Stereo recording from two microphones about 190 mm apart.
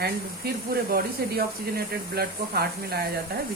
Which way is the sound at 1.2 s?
55° right (ahead or behind).